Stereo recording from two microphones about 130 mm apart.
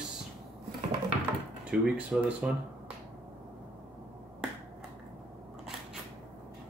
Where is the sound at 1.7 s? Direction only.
10° right (ahead or behind).